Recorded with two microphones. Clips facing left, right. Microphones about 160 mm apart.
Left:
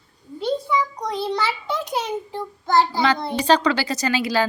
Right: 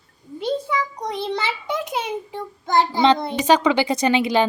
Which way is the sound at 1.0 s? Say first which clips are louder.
Left 1 dB; 20° right (ahead or behind).